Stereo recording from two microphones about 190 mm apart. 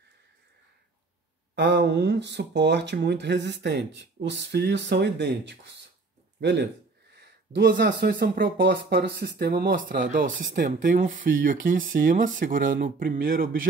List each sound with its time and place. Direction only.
1.5 s speech: 65° right (ahead or behind); by 13.7 s 45° right (ahead or behind)